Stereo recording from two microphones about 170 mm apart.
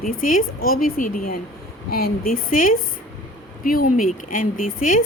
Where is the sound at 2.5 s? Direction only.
55° left (ahead or behind).